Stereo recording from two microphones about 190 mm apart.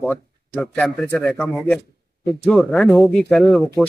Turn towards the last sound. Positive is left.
turn(degrees=5)  # may be behind; listen again after turning